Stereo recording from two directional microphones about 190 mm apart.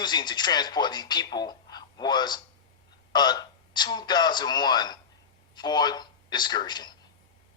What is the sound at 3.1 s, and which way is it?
A man's voice, 20° left (ahead or behind).